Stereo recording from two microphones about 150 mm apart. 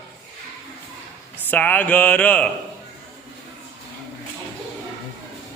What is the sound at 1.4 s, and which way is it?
A man's voice, 10° left (ahead or behind).